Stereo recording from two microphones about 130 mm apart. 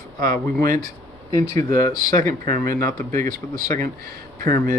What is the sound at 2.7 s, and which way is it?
Speech, 90° right.